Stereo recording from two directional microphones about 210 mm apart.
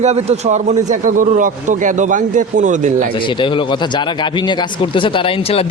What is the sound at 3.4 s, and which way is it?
Speech, 20° left (ahead or behind).